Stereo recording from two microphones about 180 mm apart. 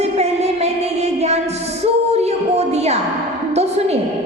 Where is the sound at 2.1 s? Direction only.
35° right (ahead or behind).